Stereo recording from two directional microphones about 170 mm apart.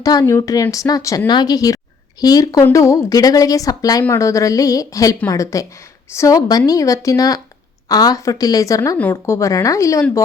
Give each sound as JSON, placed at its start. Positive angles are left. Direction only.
{"t": 0.0, "sound": "a woman's voice", "side_deg": 20}